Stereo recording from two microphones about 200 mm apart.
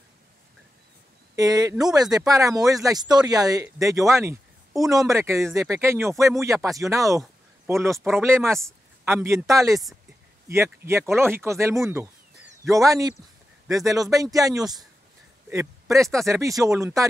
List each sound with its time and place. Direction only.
1.3 s speech: 20° right (ahead or behind)
14.1 s speech: 15° right (ahead or behind)